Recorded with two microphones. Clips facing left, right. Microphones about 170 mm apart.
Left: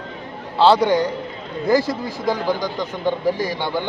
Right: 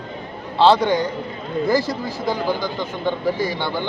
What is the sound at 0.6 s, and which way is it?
Speech, 10° left (ahead or behind).